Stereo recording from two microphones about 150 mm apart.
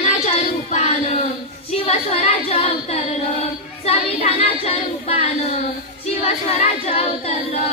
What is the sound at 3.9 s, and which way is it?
Child singing, 40° left (ahead or behind).